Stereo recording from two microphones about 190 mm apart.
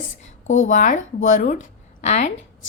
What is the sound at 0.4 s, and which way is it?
A woman's voice, 40° left (ahead or behind).